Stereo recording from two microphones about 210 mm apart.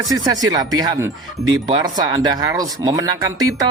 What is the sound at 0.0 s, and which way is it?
A man's voice, 20° right (ahead or behind).